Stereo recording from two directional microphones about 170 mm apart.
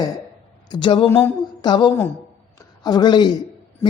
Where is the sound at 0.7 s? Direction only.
30° left (ahead or behind).